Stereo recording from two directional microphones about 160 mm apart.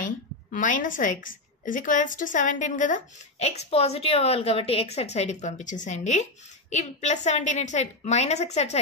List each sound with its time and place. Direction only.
0.0 s a woman's voice: 55° left (ahead or behind)